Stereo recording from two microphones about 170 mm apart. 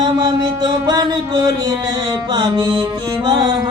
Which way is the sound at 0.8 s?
25° right (ahead or behind).